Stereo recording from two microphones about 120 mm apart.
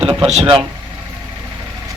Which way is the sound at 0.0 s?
50° right (ahead or behind).